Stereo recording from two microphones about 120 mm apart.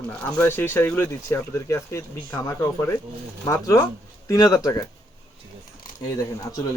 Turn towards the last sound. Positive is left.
turn(degrees=30)  # may be behind; listen again after turning